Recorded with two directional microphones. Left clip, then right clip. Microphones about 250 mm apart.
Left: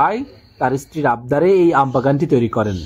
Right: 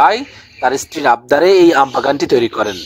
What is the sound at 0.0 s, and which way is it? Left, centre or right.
Speech, right.